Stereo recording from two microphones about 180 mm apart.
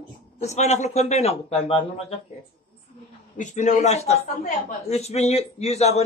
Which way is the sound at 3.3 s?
40° left (ahead or behind).